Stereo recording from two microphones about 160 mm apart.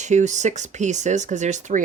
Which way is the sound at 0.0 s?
50° right (ahead or behind).